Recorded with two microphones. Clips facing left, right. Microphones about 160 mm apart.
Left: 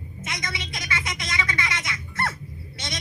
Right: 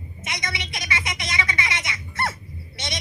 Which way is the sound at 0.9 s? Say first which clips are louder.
Right 1 dB; 20° right (ahead or behind).